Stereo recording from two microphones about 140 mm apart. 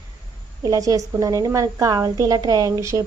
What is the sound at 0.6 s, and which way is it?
Speech, 25° right (ahead or behind).